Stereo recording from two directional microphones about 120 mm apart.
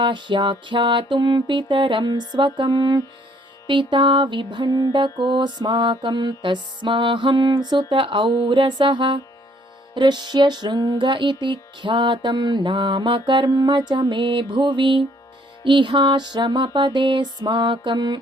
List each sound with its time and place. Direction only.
0.0 s music: 40° right (ahead or behind)